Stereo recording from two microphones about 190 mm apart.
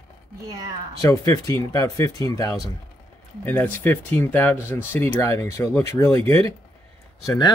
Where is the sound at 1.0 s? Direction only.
15° left (ahead or behind).